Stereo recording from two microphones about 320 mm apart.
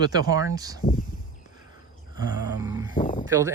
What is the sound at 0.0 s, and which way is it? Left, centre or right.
Speech, centre.